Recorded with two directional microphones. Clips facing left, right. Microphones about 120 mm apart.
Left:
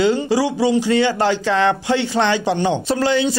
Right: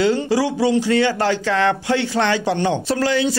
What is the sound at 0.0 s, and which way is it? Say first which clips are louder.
Speech: left 1 dB; 15° left (ahead or behind).